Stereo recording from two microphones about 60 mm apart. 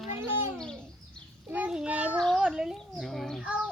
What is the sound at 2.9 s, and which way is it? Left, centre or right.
Speech, centre.